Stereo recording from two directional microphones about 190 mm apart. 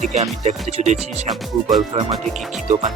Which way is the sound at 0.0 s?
40° right (ahead or behind).